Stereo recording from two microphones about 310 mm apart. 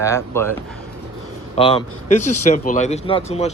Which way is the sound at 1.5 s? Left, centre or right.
Centre.